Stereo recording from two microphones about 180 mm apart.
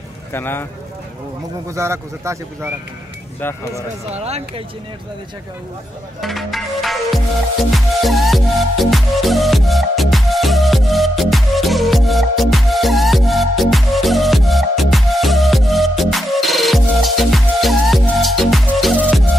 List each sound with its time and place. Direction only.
0.3 s speech: 10° left (ahead or behind)
1.7 s a man's voice: 15° right (ahead or behind)
3.3 s speech: 10° left (ahead or behind)
4.1 s speech: 35° right (ahead or behind)
6.2 s music: centre (ahead or behind)